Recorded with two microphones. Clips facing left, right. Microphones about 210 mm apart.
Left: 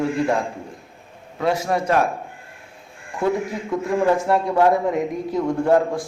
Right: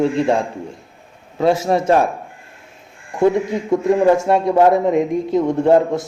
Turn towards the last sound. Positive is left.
turn(degrees=-25)  # may be behind; listen again after turning